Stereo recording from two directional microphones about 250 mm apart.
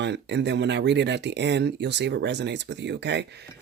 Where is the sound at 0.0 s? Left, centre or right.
Right.